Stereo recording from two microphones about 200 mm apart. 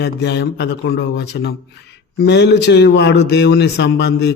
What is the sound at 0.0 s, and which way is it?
A man's voice, 60° left (ahead or behind).